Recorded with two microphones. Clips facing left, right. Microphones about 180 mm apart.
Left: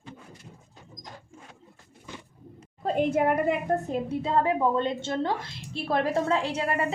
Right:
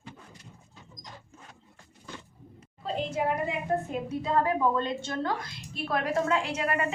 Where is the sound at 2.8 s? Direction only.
55° left (ahead or behind).